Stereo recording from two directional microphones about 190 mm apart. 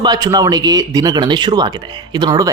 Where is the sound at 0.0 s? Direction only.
20° right (ahead or behind).